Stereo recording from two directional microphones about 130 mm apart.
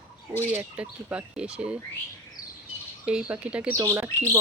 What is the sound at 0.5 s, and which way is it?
Speech, 10° right (ahead or behind).